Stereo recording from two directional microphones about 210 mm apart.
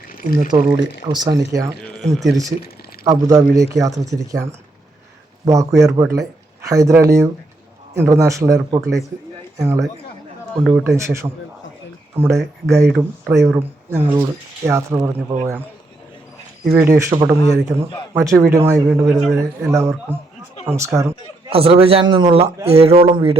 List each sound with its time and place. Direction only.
0.5 s a man's voice: 25° right (ahead or behind)
1.9 s speech: centre (ahead or behind)
3.0 s speech: 15° right (ahead or behind)
5.5 s speech: 15° right (ahead or behind)
10.6 s a man's voice: centre (ahead or behind)
10.8 s speech: 15° right (ahead or behind)
16.6 s speech: 5° right (ahead or behind)
19.2 s a man's voice: centre (ahead or behind)
19.7 s speech: 15° right (ahead or behind)
21.5 s a man's voice: 25° right (ahead or behind)